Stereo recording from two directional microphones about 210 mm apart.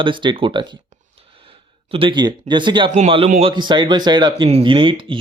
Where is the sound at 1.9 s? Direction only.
25° right (ahead or behind).